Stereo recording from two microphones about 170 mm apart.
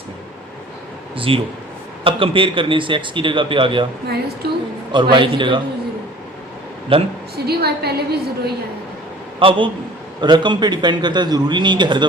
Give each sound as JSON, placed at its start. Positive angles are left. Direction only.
{"t": 1.1, "sound": "a man's voice", "side_deg": -30}
{"t": 4.4, "sound": "a woman's voice", "side_deg": -70}
{"t": 5.1, "sound": "a man's voice", "side_deg": -30}
{"t": 6.9, "sound": "a man's voice", "side_deg": -30}
{"t": 7.3, "sound": "a woman's voice", "side_deg": -70}
{"t": 9.4, "sound": "a man's voice", "side_deg": -30}